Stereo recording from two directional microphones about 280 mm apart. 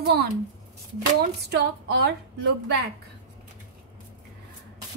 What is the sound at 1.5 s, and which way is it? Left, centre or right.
Speech, right.